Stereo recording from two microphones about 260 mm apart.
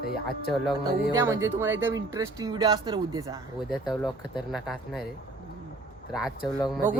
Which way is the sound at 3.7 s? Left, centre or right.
Centre.